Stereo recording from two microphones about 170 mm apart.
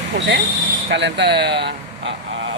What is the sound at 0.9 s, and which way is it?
Speech, 90° right.